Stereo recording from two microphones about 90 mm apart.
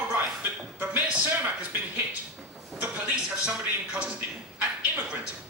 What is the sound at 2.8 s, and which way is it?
Speech, 15° right (ahead or behind).